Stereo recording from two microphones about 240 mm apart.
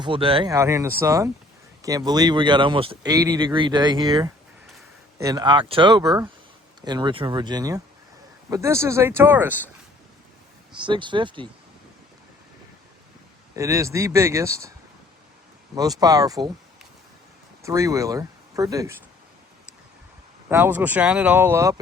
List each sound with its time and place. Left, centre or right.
0.0 s speech: right
10.8 s speech: centre
13.6 s speech: centre
15.7 s speech: centre
17.6 s speech: centre
20.5 s speech: centre